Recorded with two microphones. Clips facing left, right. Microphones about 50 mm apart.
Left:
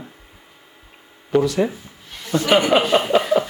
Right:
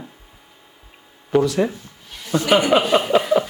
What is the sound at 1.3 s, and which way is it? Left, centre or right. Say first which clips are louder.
Speech: even; centre.